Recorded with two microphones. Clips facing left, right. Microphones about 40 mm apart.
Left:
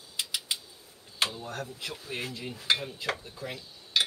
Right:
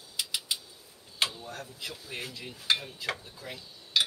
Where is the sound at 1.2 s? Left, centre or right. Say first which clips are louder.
Left 1 dB; left.